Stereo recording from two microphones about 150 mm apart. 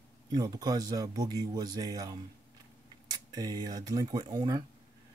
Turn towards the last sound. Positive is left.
turn(degrees=-25)  # may be behind; listen again after turning